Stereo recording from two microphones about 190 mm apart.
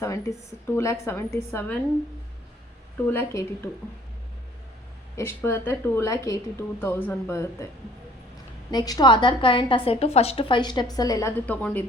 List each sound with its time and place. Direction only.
0.0 s a woman's voice: 15° left (ahead or behind)
3.1 s a woman's voice: 10° left (ahead or behind)
5.1 s a woman's voice: 15° left (ahead or behind)
8.7 s a woman's voice: 20° left (ahead or behind)